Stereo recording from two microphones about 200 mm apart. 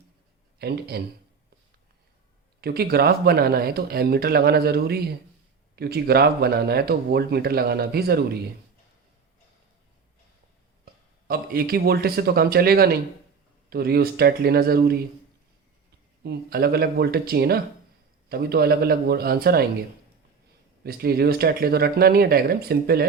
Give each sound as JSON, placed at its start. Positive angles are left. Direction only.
{"t": 0.6, "sound": "speech", "side_deg": -50}
{"t": 2.6, "sound": "speech", "side_deg": -50}
{"t": 11.3, "sound": "speech", "side_deg": -50}
{"t": 16.2, "sound": "speech", "side_deg": -50}
{"t": 20.8, "sound": "speech", "side_deg": -50}